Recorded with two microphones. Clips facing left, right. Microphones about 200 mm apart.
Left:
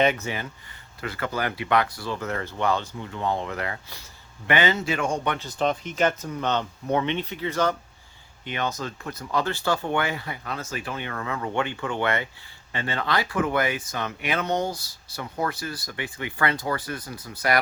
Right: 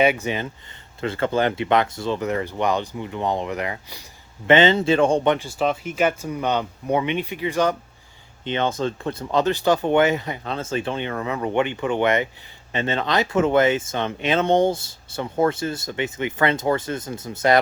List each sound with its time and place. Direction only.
0.0 s speech: 10° right (ahead or behind)
4.4 s speech: 25° right (ahead or behind)
5.3 s speech: 10° right (ahead or behind)
8.4 s speech: 25° right (ahead or behind)